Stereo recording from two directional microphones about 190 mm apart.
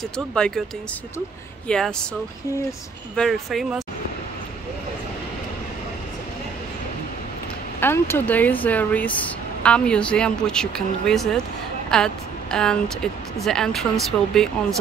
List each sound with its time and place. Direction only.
0.3 s speech: 5° left (ahead or behind)
1.7 s speech: 5° left (ahead or behind)
3.2 s speech: centre (ahead or behind)
7.8 s speech: 10° left (ahead or behind)